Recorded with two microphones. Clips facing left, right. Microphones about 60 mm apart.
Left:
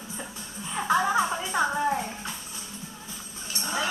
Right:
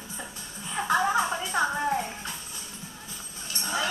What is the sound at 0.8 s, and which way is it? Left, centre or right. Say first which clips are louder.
Music: left 1 dB; centre.